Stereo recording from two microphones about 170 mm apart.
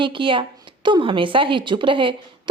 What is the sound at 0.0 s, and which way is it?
A woman's voice, 30° right (ahead or behind).